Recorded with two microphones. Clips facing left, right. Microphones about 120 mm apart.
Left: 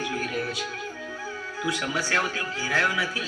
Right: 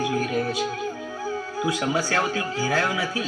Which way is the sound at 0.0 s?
25° right (ahead or behind).